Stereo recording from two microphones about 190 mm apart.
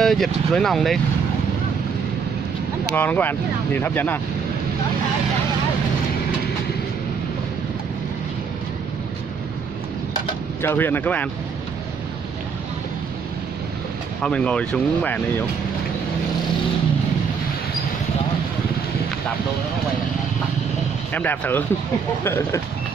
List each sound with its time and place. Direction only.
0.0 s speech: centre (ahead or behind)
3.0 s speech: 10° left (ahead or behind)
10.6 s speech: 10° left (ahead or behind)
14.2 s speech: 5° left (ahead or behind)
21.1 s speech: 10° left (ahead or behind)